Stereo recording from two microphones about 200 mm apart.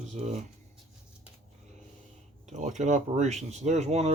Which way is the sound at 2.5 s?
35° right (ahead or behind).